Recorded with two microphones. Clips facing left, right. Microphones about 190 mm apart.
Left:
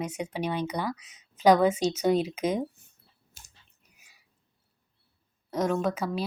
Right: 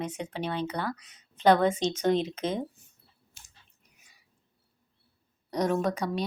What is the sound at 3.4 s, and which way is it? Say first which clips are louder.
Chewing: left 3 dB; 40° left (ahead or behind).